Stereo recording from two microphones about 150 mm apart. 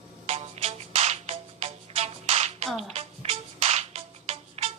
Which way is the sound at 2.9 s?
45° right (ahead or behind).